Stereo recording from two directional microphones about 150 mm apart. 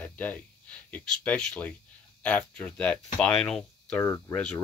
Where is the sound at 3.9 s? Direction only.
20° left (ahead or behind).